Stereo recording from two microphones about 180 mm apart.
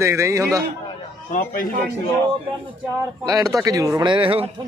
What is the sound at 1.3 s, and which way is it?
Speech, 45° left (ahead or behind).